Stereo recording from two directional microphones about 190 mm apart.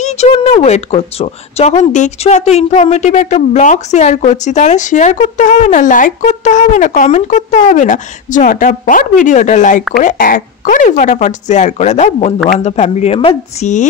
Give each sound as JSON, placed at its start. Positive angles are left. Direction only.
{"t": 0.0, "sound": "speech", "side_deg": 35}